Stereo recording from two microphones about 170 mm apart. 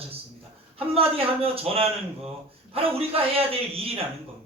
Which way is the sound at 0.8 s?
35° right (ahead or behind).